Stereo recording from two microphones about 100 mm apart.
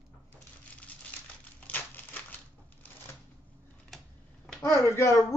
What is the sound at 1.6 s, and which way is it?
Crumpling, 20° left (ahead or behind).